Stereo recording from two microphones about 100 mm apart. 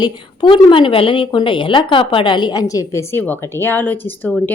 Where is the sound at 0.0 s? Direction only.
55° left (ahead or behind).